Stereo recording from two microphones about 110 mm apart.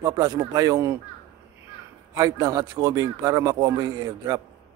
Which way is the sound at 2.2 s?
30° right (ahead or behind).